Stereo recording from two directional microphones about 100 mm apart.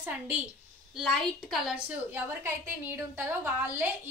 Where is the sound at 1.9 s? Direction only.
20° right (ahead or behind).